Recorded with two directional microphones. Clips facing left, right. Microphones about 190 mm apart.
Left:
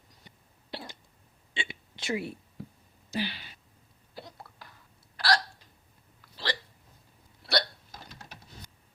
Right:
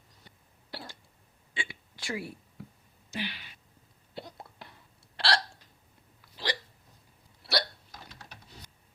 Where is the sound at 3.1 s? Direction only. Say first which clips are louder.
Left 4 dB; 35° left (ahead or behind).